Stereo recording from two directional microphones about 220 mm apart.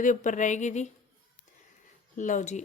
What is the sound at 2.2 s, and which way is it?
Speech, 35° left (ahead or behind).